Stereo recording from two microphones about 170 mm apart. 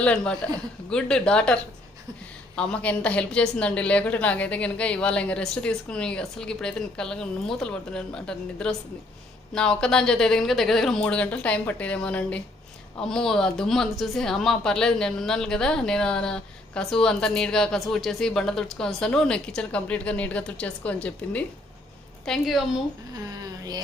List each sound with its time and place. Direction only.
0.0 s a woman's voice: 5° left (ahead or behind)
2.6 s a woman's voice: 5° left (ahead or behind)
23.4 s speech: 25° right (ahead or behind)